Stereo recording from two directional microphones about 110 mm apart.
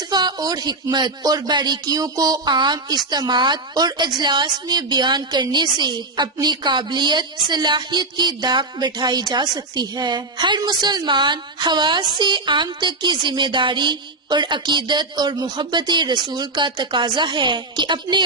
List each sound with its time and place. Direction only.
0.1 s a woman's voice: 40° right (ahead or behind)